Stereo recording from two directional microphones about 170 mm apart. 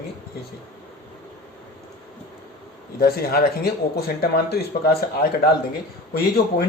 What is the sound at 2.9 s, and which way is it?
Speech, 60° left (ahead or behind).